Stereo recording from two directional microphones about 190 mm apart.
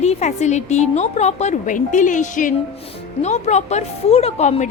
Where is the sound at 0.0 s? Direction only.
35° left (ahead or behind).